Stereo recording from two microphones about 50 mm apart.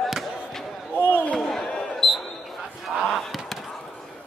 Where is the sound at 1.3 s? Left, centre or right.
Centre.